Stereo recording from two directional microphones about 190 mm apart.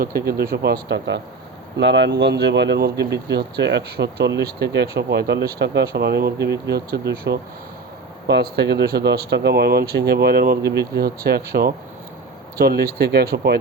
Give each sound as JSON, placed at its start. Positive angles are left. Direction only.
{"t": 0.0, "sound": "speech", "side_deg": -55}
{"t": 12.5, "sound": "speech", "side_deg": -55}